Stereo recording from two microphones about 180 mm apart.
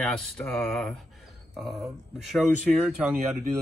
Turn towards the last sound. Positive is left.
turn(degrees=-10)  # may be behind; listen again after turning